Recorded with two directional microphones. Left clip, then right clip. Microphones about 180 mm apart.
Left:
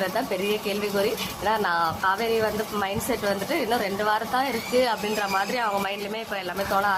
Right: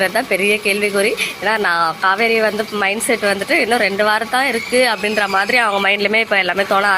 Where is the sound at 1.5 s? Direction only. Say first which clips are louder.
Right 7 dB; 15° right (ahead or behind).